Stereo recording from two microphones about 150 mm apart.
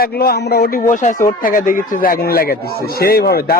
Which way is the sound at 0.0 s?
90° left.